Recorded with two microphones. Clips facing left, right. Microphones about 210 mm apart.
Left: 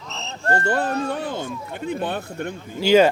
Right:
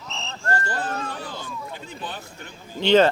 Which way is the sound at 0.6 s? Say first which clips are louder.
Left 7 dB; 60° left (ahead or behind).